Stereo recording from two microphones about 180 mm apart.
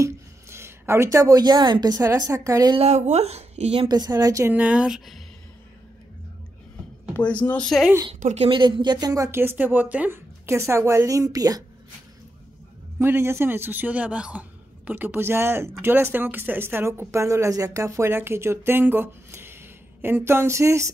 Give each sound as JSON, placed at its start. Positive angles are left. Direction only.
{"t": 0.0, "sound": "speech", "side_deg": -15}
{"t": 2.8, "sound": "speech", "side_deg": -40}
{"t": 7.2, "sound": "speech", "side_deg": 10}
{"t": 8.1, "sound": "a woman's voice", "side_deg": -40}
{"t": 8.5, "sound": "speech", "side_deg": -25}
{"t": 13.0, "sound": "speech", "side_deg": -15}